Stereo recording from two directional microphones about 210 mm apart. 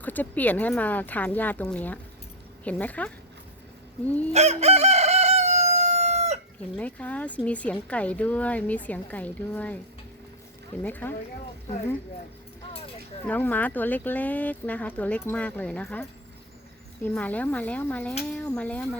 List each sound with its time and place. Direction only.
0.0 s speech: 10° left (ahead or behind)
4.3 s crowing: 30° right (ahead or behind)
6.7 s speech: 5° left (ahead or behind)
10.8 s speech: 10° left (ahead or behind)
13.2 s speech: 10° left (ahead or behind)